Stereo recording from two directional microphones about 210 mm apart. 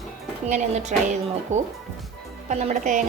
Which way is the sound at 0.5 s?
35° right (ahead or behind).